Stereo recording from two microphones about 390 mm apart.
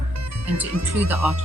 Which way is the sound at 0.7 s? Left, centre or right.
Right.